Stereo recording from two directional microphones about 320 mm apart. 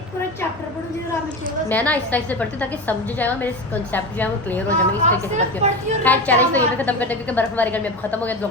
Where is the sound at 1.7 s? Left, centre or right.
Centre.